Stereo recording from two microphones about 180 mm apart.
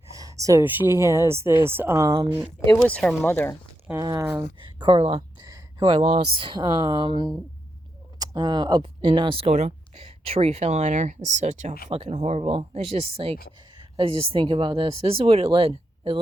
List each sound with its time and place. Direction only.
0.2 s speech: 20° right (ahead or behind)
2.8 s speech: 5° left (ahead or behind)
4.0 s a woman's voice: 20° right (ahead or behind)
5.4 s speech: 20° right (ahead or behind)